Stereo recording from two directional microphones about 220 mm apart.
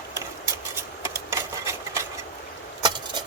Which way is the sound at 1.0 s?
10° right (ahead or behind).